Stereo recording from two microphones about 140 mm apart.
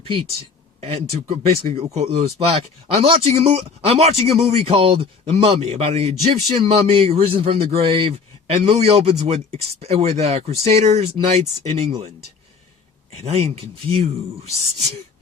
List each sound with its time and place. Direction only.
0.8 s speech: 45° right (ahead or behind)